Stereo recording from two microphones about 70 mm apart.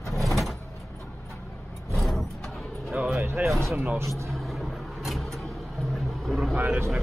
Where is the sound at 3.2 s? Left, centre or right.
Right.